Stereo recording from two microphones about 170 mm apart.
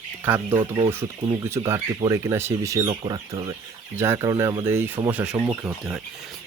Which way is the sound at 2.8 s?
35° right (ahead or behind).